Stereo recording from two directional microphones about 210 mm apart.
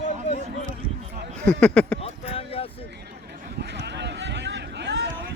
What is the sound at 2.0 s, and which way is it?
Speech, 25° left (ahead or behind).